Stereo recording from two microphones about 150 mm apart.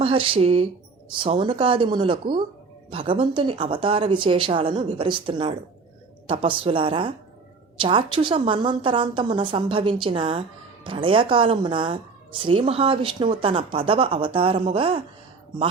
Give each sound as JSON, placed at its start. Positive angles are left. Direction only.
{"t": 0.0, "sound": "a woman's voice", "side_deg": -35}